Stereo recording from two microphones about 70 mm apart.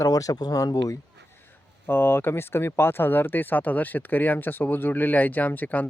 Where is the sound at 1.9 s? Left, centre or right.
Left.